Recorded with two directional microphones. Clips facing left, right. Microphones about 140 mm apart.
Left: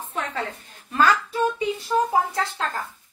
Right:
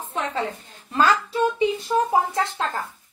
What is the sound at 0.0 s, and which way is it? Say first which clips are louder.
A woman's voice: right 3 dB; 20° right (ahead or behind).